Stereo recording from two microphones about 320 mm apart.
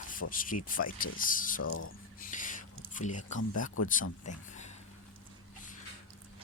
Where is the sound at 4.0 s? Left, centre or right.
Left.